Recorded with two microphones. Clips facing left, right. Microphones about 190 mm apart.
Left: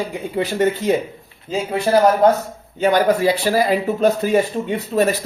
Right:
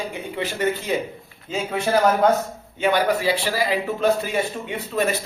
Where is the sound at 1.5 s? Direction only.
40° left (ahead or behind).